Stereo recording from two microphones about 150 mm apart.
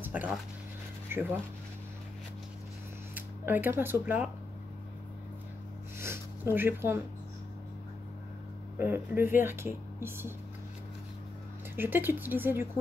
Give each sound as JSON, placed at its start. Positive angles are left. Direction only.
{"t": 0.0, "sound": "speech", "side_deg": -10}
{"t": 3.2, "sound": "speech", "side_deg": -10}
{"t": 5.9, "sound": "a sound", "side_deg": -15}
{"t": 8.7, "sound": "speech", "side_deg": -15}
{"t": 11.7, "sound": "speech", "side_deg": -15}